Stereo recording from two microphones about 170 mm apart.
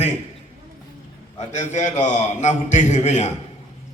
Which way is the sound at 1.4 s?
45° left (ahead or behind).